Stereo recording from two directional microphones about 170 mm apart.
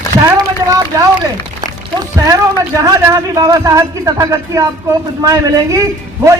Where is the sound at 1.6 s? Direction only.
20° right (ahead or behind).